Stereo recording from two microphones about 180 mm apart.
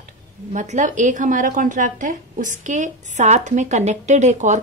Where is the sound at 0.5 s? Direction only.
40° right (ahead or behind).